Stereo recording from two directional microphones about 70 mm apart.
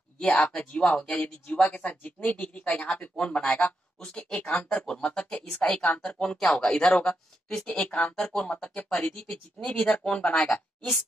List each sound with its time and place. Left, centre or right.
0.2 s speech: centre
10.5 s a woman's voice: centre